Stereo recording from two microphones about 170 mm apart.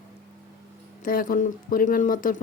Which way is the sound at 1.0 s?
55° left (ahead or behind).